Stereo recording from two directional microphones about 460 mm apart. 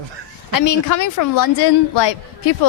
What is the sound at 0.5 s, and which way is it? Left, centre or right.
A woman's voice, left.